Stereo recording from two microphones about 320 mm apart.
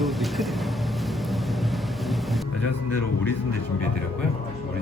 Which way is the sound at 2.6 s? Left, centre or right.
Left.